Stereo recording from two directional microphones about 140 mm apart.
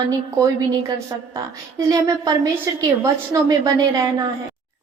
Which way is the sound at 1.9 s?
25° right (ahead or behind).